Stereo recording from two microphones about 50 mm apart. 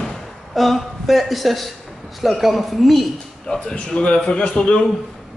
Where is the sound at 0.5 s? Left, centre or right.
Centre.